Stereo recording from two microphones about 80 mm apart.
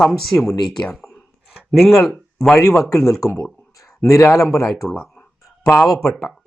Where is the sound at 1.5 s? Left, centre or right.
Centre.